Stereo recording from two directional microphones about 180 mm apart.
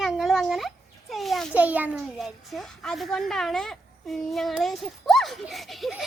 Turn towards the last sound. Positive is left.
turn(degrees=0)  # may be behind; listen again after turning